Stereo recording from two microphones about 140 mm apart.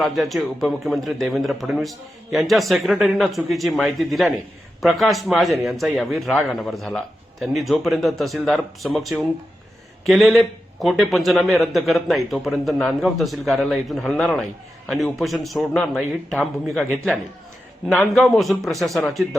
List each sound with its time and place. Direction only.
0.0 s a man's voice: centre (ahead or behind)